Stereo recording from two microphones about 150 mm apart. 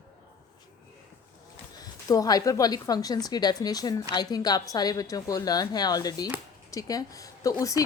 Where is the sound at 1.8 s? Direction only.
25° left (ahead or behind).